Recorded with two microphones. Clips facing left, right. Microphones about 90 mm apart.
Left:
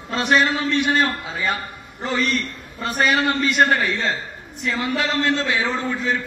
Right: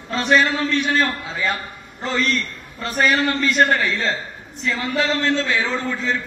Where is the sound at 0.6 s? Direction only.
5° left (ahead or behind).